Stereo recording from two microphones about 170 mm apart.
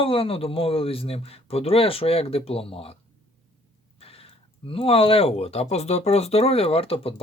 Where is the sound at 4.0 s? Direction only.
35° left (ahead or behind).